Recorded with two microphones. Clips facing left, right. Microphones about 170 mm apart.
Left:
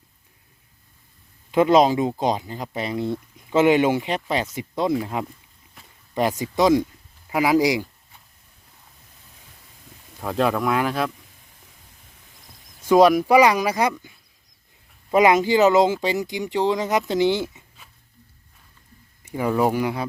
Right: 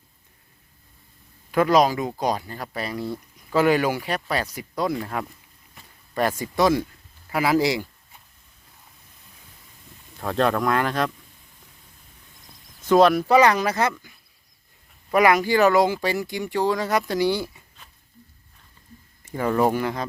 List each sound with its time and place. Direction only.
1.5 s speech: 20° left (ahead or behind)
10.2 s speech: 5° left (ahead or behind)
12.8 s speech: 10° left (ahead or behind)
15.1 s speech: 20° left (ahead or behind)
19.3 s speech: 10° left (ahead or behind)